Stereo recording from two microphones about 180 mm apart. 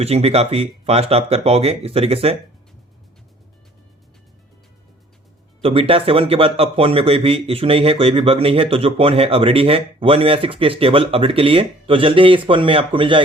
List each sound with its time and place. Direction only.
0.0 s speech: 35° right (ahead or behind)
5.6 s speech: 30° right (ahead or behind)